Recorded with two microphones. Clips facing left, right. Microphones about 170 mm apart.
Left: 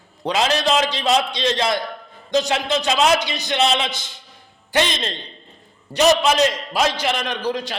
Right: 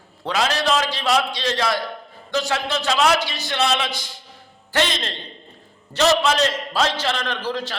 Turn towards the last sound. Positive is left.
turn(degrees=15)  # may be behind; listen again after turning